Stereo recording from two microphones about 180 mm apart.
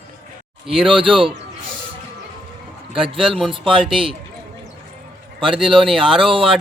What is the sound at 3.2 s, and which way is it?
Speech, centre (ahead or behind).